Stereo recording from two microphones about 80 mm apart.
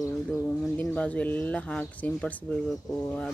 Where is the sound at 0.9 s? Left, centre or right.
Centre.